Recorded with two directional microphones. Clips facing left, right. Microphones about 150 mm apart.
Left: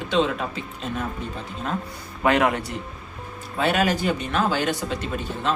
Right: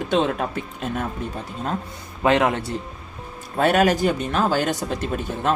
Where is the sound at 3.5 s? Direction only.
45° right (ahead or behind).